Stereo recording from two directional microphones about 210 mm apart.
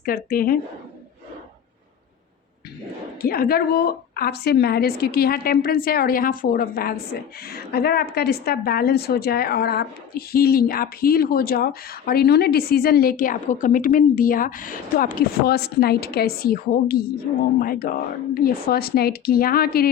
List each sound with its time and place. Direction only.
0.0 s speech: 45° left (ahead or behind)
3.2 s speech: 45° left (ahead or behind)